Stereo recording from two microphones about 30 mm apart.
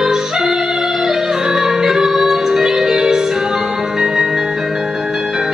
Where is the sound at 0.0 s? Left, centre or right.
Centre.